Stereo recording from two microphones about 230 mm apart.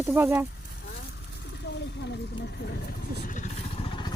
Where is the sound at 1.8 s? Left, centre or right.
Left.